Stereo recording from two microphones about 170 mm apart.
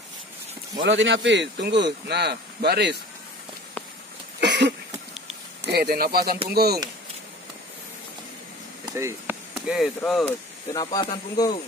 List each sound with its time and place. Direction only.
0.8 s a man's voice: 90° right; by 3.0 s 70° right (ahead or behind)
4.4 s cough: 85° right
5.7 s speech: 65° right (ahead or behind)
8.8 s speech: 15° right (ahead or behind); by 10.2 s centre (ahead or behind)
10.2 s speech: 20° left (ahead or behind)